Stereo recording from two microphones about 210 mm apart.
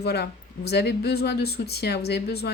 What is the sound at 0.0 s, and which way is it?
Speech, 50° left (ahead or behind).